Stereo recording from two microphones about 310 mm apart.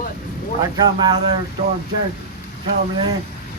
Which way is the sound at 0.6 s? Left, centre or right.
Centre.